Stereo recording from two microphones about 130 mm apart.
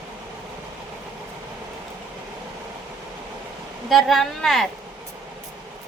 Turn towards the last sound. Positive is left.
turn(degrees=5)  # may be behind; listen again after turning